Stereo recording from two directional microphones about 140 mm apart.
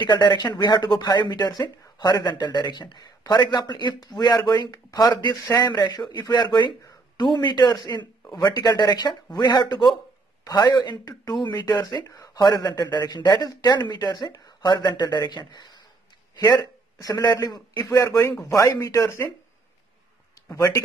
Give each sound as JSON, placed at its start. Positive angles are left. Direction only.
{"t": 0.0, "sound": "a man's voice", "side_deg": 30}
{"t": 20.4, "sound": "speech", "side_deg": 25}